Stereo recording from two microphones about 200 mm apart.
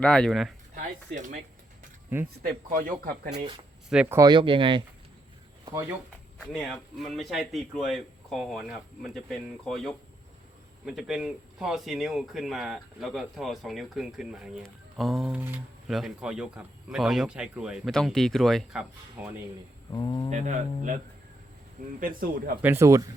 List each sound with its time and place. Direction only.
0.0 s speech: 5° left (ahead or behind)
0.7 s speech: 40° right (ahead or behind)
2.5 s speech: 40° right (ahead or behind)
3.8 s speech: 5° right (ahead or behind); by 4.8 s 25° right (ahead or behind)
6.5 s speech: centre (ahead or behind)
19.9 s speech: 20° left (ahead or behind)
20.3 s speech: 35° right (ahead or behind)
22.6 s speech: 15° right (ahead or behind)